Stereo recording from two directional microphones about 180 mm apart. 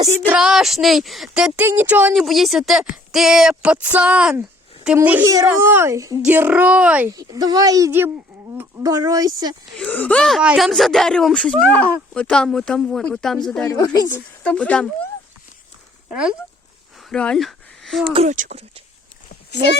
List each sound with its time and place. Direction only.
0.3 s speech: 5° right (ahead or behind)
7.1 s speech: 20° right (ahead or behind)
9.7 s speech: 10° left (ahead or behind)
13.7 s speech: 20° left (ahead or behind)
14.4 s speech: 5° left (ahead or behind)
16.0 s speech: 5° right (ahead or behind)
17.1 s a sound: 5° left (ahead or behind)
18.1 s speech: 40° right (ahead or behind)